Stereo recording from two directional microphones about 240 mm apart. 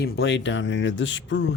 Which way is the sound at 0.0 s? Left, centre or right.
Left.